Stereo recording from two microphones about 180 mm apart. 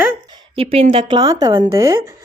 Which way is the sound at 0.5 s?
35° right (ahead or behind).